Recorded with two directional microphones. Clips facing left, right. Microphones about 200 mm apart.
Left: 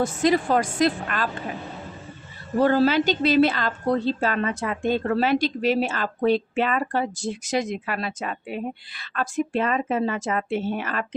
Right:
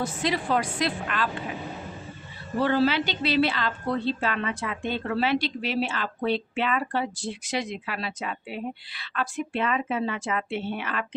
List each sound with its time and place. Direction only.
0.0 s a woman's voice: 45° left (ahead or behind)
2.6 s a woman's voice: 45° left (ahead or behind)